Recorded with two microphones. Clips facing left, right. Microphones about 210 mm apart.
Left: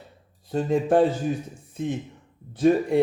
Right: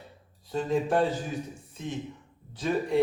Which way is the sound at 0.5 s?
55° left (ahead or behind).